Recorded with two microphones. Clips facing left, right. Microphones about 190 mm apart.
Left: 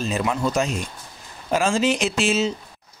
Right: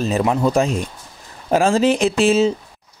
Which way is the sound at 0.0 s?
40° right (ahead or behind).